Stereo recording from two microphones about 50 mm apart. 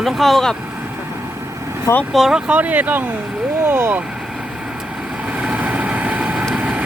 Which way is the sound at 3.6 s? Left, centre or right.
Right.